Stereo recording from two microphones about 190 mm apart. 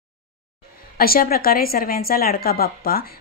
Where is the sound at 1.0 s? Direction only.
50° left (ahead or behind).